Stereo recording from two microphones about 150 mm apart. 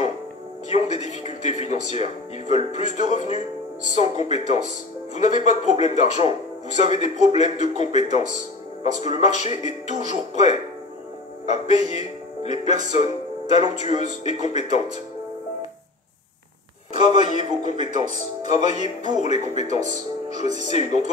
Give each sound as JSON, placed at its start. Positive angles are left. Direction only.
{"t": 0.7, "sound": "speech", "side_deg": 50}
{"t": 17.3, "sound": "speech", "side_deg": 50}